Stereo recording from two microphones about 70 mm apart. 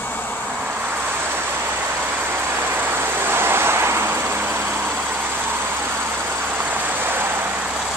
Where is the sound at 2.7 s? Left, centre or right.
Right.